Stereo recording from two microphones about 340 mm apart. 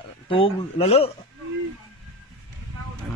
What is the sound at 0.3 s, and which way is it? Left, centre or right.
Speech, centre.